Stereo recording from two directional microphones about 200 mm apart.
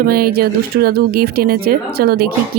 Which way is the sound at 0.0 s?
50° right (ahead or behind).